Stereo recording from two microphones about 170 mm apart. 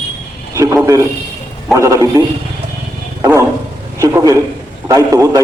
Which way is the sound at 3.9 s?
20° right (ahead or behind).